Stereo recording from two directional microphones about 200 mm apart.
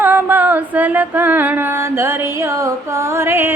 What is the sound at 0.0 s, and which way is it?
Music, 10° right (ahead or behind).